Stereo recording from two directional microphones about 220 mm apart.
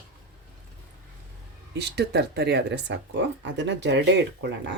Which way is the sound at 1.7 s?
50° right (ahead or behind).